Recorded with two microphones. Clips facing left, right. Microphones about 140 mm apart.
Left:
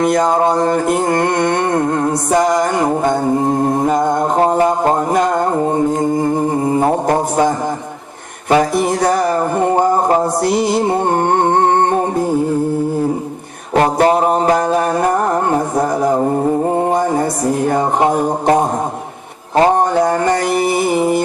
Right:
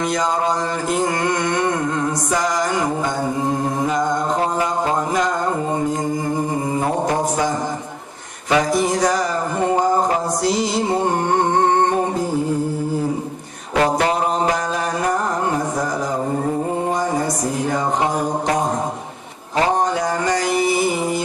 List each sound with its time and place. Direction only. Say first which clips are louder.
0.0 s music: left 7 dB; 55° left (ahead or behind)
6.3 s mantra: left 6 dB; 50° left (ahead or behind)
8.4 s music: left 4 dB; 50° left (ahead or behind)
13.7 s a sound: left 5 dB; 45° left (ahead or behind)
16.7 s music: left 5 dB; 55° left (ahead or behind)
17.7 s a sound: left 5 dB; 55° left (ahead or behind)
19.5 s mantra: left 6 dB; 50° left (ahead or behind)